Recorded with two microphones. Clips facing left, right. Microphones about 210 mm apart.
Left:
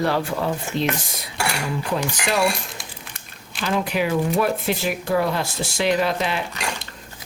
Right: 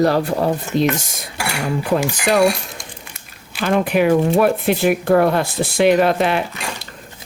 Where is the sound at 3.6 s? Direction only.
55° right (ahead or behind).